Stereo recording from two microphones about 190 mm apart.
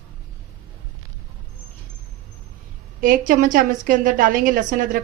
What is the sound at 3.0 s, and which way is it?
A woman's voice, 45° right (ahead or behind).